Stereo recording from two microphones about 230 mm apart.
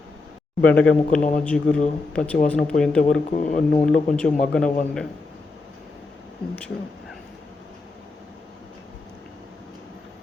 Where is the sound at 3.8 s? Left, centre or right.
Centre.